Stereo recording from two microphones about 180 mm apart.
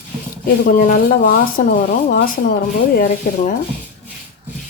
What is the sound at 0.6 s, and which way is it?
Speech, 55° left (ahead or behind).